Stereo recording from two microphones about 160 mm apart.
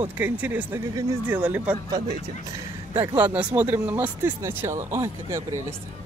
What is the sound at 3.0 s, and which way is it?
Speech, 10° right (ahead or behind).